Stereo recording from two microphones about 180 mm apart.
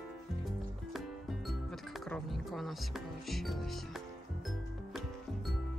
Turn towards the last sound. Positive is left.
turn(degrees=0)  # may be behind; listen again after turning